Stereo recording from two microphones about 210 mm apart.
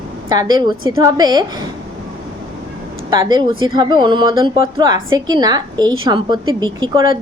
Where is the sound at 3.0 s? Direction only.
20° right (ahead or behind).